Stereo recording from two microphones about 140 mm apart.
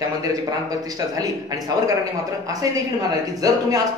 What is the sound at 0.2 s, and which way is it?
Speech, 25° right (ahead or behind).